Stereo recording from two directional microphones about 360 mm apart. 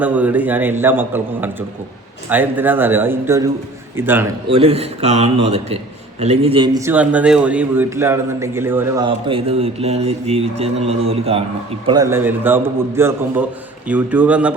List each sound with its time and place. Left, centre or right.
0.0 s a man's voice: centre